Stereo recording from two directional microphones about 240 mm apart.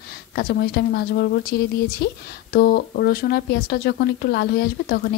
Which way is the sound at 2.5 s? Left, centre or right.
Left.